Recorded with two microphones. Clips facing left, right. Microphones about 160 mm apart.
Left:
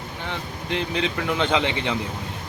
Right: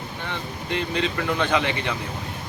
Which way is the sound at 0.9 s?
15° left (ahead or behind).